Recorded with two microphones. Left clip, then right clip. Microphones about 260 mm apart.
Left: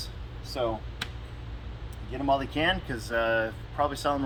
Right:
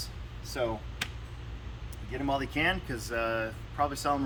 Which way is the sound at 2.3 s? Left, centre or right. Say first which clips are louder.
Left 2 dB; centre.